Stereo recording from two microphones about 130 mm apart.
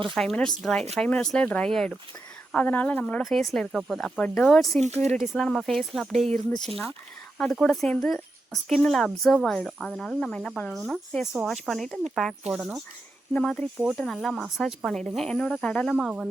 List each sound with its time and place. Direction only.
0.1 s speech: 5° left (ahead or behind)
4.8 s speech: 55° right (ahead or behind)
5.3 s speech: centre (ahead or behind)